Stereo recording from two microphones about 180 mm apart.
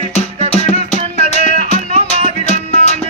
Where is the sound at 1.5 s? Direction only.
45° right (ahead or behind).